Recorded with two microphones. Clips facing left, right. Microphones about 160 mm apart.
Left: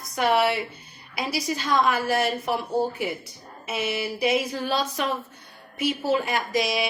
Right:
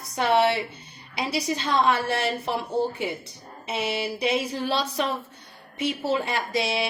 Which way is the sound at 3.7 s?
30° right (ahead or behind).